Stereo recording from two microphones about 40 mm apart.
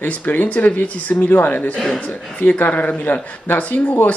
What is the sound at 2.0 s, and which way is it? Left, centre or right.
Speech, left.